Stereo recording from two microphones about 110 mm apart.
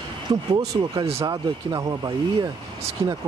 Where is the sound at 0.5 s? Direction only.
40° right (ahead or behind).